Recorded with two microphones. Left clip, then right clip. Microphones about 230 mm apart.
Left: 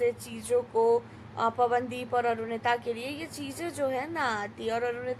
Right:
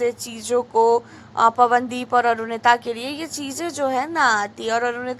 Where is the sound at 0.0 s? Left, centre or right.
Centre.